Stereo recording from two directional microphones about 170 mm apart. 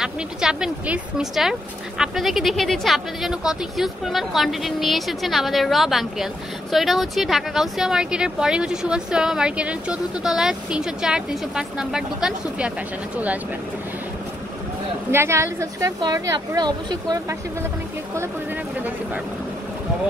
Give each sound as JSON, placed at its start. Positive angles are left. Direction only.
{"t": 0.0, "sound": "speech", "side_deg": -5}
{"t": 15.0, "sound": "speech", "side_deg": -15}